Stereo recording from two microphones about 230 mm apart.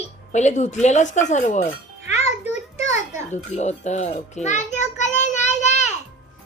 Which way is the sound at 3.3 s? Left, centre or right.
Left.